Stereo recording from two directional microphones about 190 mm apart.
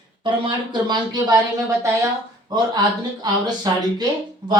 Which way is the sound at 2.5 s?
20° right (ahead or behind).